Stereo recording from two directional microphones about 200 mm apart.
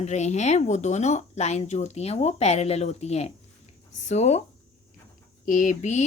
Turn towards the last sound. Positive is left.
turn(degrees=35)  # may be behind; listen again after turning